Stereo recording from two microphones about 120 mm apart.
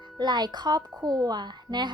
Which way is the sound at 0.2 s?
35° right (ahead or behind).